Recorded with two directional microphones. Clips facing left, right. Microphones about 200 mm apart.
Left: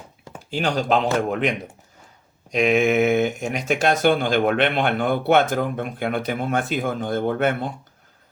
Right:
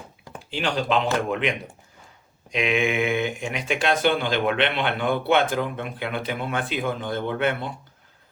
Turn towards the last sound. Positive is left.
turn(degrees=45)  # may be behind; listen again after turning